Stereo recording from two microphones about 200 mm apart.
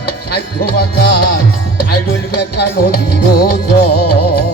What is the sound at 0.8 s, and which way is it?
Music, 55° left (ahead or behind).